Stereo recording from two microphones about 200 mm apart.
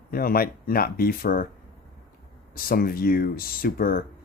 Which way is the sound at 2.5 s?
45° left (ahead or behind).